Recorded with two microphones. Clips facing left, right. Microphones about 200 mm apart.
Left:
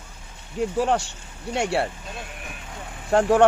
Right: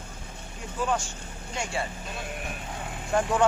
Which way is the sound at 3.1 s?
70° left (ahead or behind).